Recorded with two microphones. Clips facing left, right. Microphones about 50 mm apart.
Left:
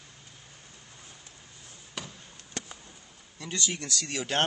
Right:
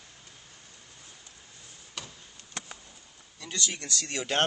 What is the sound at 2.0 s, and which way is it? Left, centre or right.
Chop, centre.